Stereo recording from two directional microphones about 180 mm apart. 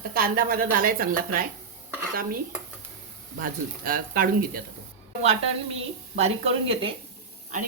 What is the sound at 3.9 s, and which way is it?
Speech, 55° right (ahead or behind).